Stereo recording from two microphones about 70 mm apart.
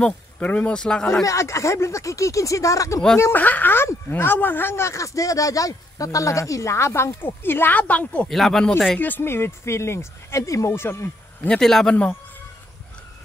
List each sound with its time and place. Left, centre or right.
0.4 s speech: left
1.2 s speech: left
3.3 s speech: left
8.3 s speech: centre
8.9 s speech: left
10.7 s speech: left
11.4 s speech: centre